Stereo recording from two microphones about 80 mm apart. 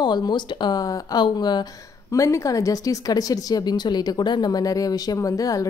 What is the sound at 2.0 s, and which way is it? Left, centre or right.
A woman's voice, left.